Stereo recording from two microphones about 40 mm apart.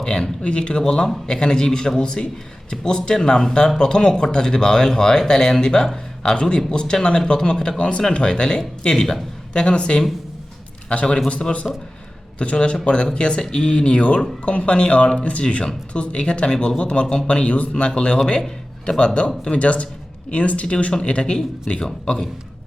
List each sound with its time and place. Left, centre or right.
0.0 s a man's voice: left
7.8 s speech: left
11.6 s a man's voice: centre
12.4 s speech: left